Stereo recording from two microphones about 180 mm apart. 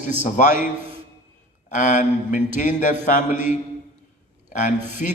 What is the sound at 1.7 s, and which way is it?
Speech, 45° left (ahead or behind).